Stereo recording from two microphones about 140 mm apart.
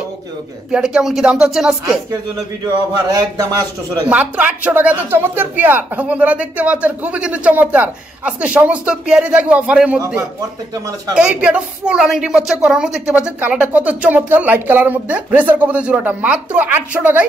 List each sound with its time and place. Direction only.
0.7 s speech: 5° right (ahead or behind)
3.1 s a man's voice: 30° right (ahead or behind)
4.1 s a woman's voice: 10° right (ahead or behind)